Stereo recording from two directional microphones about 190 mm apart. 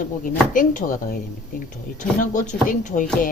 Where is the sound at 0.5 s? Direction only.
45° left (ahead or behind).